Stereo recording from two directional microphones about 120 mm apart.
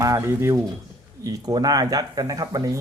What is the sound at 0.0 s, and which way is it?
Speech, 25° right (ahead or behind).